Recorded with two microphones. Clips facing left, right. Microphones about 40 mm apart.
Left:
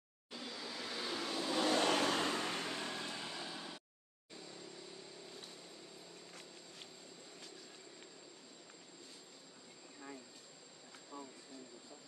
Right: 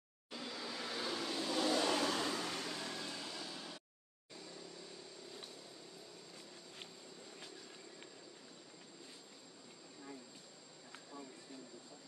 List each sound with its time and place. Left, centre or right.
0.3 s vehicle: centre
1.7 s vehicle: left; by 3.8 s centre